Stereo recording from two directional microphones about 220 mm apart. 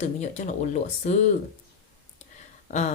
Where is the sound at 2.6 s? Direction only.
30° left (ahead or behind).